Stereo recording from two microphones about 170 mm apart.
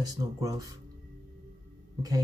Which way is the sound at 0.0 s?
20° right (ahead or behind).